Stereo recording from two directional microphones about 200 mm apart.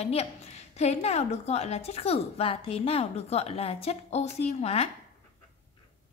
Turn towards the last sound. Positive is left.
turn(degrees=30)  # may be behind; listen again after turning